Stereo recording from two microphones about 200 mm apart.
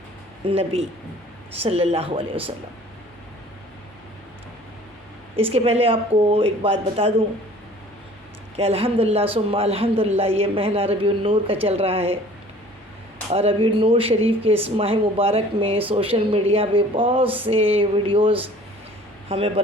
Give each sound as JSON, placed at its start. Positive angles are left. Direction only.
{"t": 0.4, "sound": "speech", "side_deg": -30}
{"t": 5.4, "sound": "speech", "side_deg": -30}
{"t": 8.5, "sound": "speech", "side_deg": -30}
{"t": 13.3, "sound": "speech", "side_deg": -30}
{"t": 17.2, "sound": "a sound", "side_deg": -10}
{"t": 17.5, "sound": "speech", "side_deg": -25}